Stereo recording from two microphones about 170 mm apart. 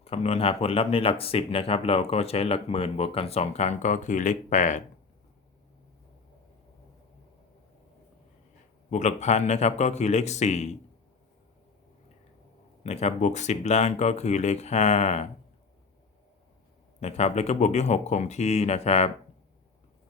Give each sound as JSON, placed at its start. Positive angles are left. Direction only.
{"t": 0.0, "sound": "speech", "side_deg": 35}
{"t": 8.9, "sound": "speech", "side_deg": 45}
{"t": 12.8, "sound": "speech", "side_deg": 40}
{"t": 17.0, "sound": "speech", "side_deg": 40}